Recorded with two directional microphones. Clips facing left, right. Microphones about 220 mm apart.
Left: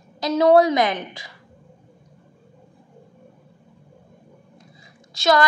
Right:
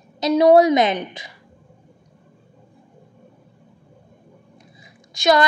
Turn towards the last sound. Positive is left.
turn(degrees=-15)  # may be behind; listen again after turning